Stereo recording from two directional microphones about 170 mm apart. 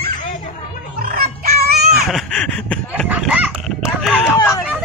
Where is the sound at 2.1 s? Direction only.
5° left (ahead or behind).